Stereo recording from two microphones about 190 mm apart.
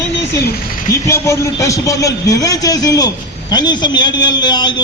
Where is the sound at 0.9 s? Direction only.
15° left (ahead or behind).